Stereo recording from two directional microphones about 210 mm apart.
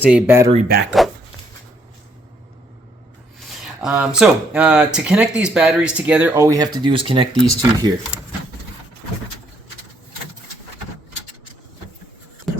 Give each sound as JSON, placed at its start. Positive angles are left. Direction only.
{"t": 0.0, "sound": "speech", "side_deg": -5}
{"t": 1.0, "sound": "dog", "side_deg": 0}
{"t": 3.6, "sound": "speech", "side_deg": -5}
{"t": 12.5, "sound": "beatboxing", "side_deg": 0}